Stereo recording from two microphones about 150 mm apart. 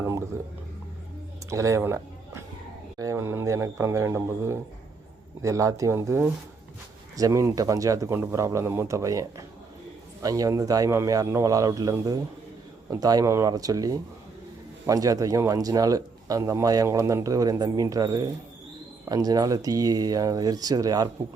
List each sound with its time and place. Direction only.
1.5 s speech: 20° right (ahead or behind)
10.2 s speech: 25° right (ahead or behind)